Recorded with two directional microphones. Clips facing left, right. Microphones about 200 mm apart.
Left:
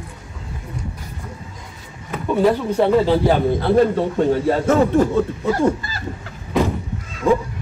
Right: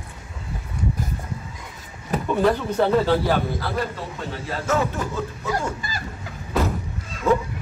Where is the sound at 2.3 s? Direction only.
10° left (ahead or behind).